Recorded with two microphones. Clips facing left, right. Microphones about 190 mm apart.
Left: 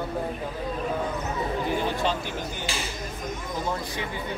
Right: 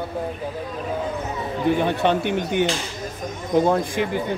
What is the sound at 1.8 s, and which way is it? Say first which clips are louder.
Speech: right 7 dB; 65° right (ahead or behind).